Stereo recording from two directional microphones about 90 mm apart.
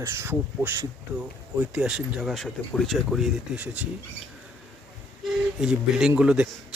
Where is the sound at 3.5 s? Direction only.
15° right (ahead or behind).